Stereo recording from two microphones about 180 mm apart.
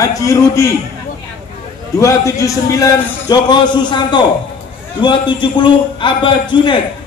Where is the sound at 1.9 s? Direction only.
15° left (ahead or behind).